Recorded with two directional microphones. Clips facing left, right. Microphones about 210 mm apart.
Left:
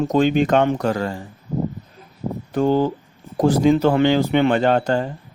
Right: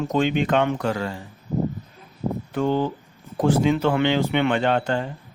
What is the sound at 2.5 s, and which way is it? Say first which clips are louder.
Speech: left 5 dB; 40° left (ahead or behind).